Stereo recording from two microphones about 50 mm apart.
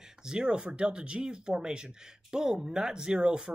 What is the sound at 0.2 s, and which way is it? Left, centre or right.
Speech, centre.